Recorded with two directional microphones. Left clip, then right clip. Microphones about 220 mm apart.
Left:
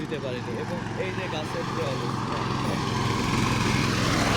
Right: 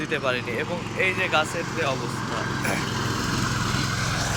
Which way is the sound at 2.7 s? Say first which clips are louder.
Right 1 dB; 20° right (ahead or behind).